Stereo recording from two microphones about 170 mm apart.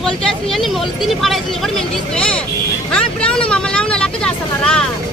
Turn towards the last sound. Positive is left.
turn(degrees=5)  # may be behind; listen again after turning